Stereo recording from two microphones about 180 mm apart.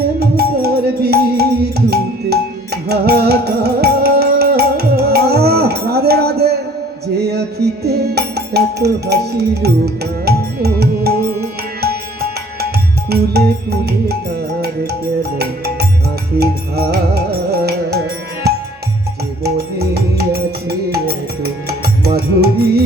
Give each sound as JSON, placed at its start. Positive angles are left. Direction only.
{"t": 0.2, "sound": "music", "side_deg": -60}
{"t": 2.9, "sound": "music", "side_deg": -65}
{"t": 15.2, "sound": "music", "side_deg": -65}